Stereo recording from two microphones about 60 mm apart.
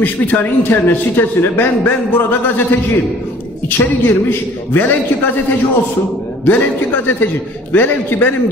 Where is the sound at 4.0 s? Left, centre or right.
Left.